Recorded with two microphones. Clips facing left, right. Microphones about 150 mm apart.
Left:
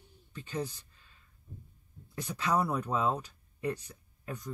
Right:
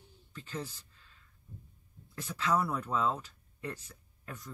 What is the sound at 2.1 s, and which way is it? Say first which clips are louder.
Speech: even; 15° left (ahead or behind).